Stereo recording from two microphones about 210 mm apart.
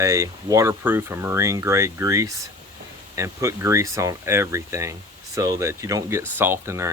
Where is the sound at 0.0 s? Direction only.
15° right (ahead or behind).